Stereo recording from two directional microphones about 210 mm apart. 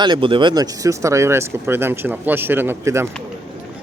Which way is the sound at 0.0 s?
25° right (ahead or behind).